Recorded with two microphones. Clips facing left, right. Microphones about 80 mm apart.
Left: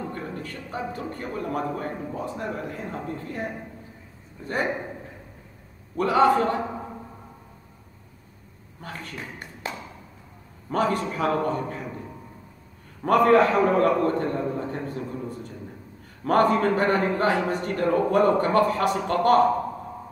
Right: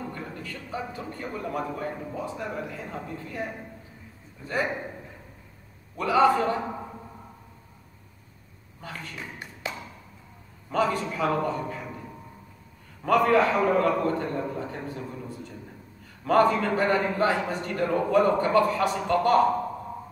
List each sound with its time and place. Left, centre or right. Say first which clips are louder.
0.1 s a man's voice: left 3 dB; left
5.9 s a man's voice: left 2 dB; left
10.7 s a man's voice: left 1 dB; left
13.0 s a man's voice: left 3 dB; left